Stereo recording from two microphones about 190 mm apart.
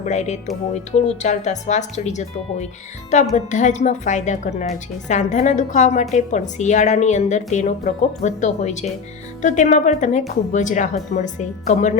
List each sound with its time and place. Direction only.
0.0 s a woman's voice: 35° left (ahead or behind)